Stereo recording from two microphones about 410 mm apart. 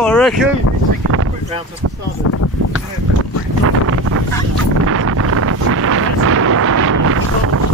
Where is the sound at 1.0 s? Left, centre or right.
Right.